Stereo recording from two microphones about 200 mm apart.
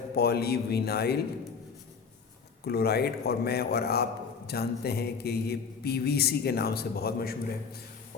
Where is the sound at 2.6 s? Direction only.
55° left (ahead or behind).